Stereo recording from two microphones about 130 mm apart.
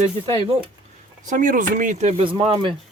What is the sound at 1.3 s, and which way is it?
Speech, 90° right.